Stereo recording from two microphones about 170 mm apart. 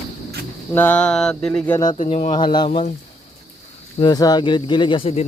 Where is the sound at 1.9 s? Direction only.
40° left (ahead or behind).